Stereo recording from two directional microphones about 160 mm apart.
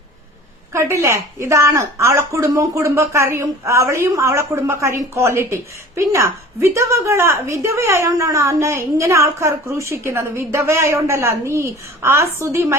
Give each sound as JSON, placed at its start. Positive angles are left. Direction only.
{"t": 0.7, "sound": "a woman's voice", "side_deg": -15}